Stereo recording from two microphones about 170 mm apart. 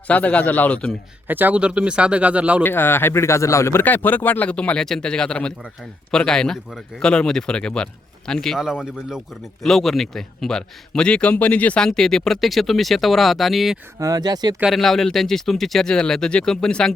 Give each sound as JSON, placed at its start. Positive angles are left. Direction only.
{"t": 0.1, "sound": "speech", "side_deg": 10}
{"t": 1.3, "sound": "speech", "side_deg": -10}
{"t": 2.6, "sound": "a man's voice", "side_deg": 10}
{"t": 14.0, "sound": "speech", "side_deg": -20}
{"t": 14.6, "sound": "a man's voice", "side_deg": 0}